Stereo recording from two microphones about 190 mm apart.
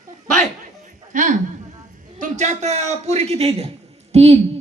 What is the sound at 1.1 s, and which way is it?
A man's voice, 40° right (ahead or behind).